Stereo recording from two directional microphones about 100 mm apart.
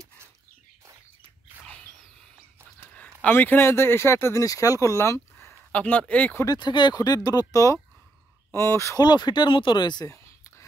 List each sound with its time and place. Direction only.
2.9 s speech: 15° left (ahead or behind)
5.7 s speech: 15° left (ahead or behind)
6.4 s speech: 45° left (ahead or behind); by 9.0 s 30° left (ahead or behind)
9.0 s speech: 45° left (ahead or behind)
10.0 s a sound: 25° left (ahead or behind)